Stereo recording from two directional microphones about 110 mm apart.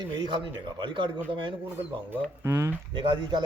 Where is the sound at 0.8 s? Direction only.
50° right (ahead or behind).